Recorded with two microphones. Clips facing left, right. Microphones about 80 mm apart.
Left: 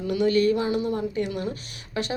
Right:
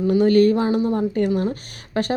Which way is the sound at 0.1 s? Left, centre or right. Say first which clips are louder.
Right 5 dB; right.